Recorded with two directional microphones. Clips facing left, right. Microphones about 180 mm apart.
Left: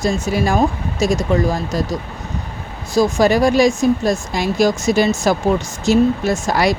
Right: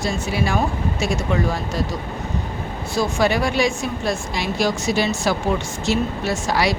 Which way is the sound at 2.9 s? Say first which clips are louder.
Left 6 dB; 40° left (ahead or behind).